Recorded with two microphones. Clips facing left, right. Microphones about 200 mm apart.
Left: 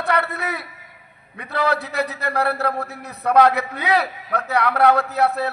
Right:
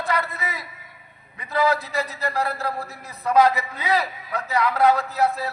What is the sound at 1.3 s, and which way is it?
A man's voice, 65° left (ahead or behind).